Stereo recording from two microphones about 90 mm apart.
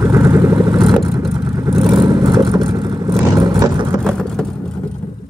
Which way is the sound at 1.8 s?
55° right (ahead or behind).